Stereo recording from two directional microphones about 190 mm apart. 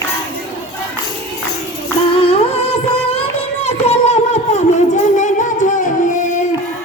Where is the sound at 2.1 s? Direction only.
30° left (ahead or behind).